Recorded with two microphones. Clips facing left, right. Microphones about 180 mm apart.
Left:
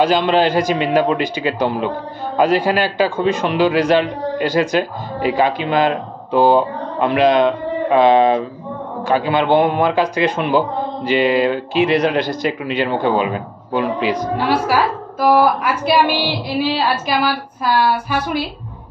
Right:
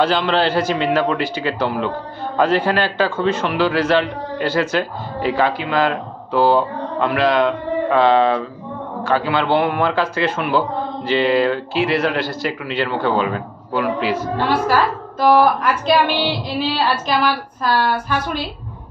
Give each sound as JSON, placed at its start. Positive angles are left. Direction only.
{"t": 0.0, "sound": "a man's voice", "side_deg": 15}